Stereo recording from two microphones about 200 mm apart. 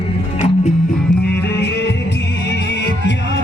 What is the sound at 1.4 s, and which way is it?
Music, 60° left (ahead or behind).